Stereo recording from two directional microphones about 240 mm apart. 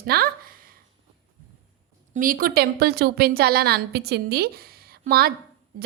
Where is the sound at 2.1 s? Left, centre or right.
Right.